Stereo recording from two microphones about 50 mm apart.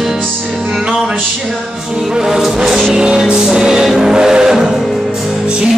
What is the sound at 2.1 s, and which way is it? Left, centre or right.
Music, centre.